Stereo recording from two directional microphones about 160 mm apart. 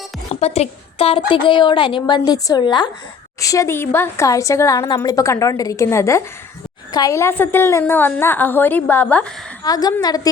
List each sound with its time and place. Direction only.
0.3 s a woman's voice: 40° left (ahead or behind); by 9.2 s 10° left (ahead or behind)
9.6 s a woman's voice: 25° left (ahead or behind)